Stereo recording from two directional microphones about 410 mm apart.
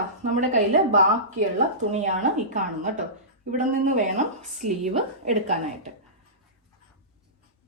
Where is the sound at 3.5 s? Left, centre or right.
Centre.